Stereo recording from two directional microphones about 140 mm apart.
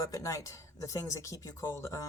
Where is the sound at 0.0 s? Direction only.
25° left (ahead or behind).